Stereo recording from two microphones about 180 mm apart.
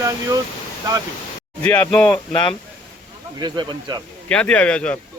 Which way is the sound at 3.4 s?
25° right (ahead or behind).